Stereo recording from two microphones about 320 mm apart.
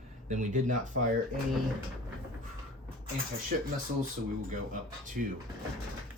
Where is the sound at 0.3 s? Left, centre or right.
Right.